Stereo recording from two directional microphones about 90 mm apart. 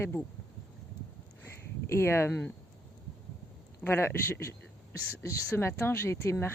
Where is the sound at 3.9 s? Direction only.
25° left (ahead or behind).